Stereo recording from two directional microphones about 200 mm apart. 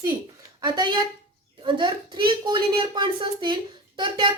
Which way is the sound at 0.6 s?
20° right (ahead or behind).